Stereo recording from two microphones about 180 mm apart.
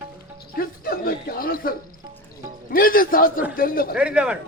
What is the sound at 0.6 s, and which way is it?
Speech, 55° left (ahead or behind).